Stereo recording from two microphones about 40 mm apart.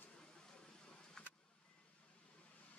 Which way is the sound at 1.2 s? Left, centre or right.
Left.